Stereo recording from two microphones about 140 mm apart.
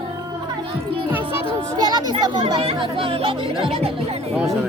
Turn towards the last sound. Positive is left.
turn(degrees=-45)  # may be behind; listen again after turning